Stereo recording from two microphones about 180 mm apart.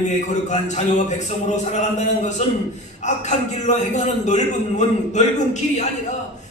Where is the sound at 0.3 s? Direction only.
40° left (ahead or behind).